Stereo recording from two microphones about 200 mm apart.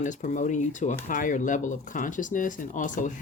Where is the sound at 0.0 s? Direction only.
40° left (ahead or behind).